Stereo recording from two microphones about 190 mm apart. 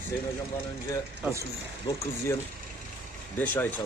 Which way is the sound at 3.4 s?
10° left (ahead or behind).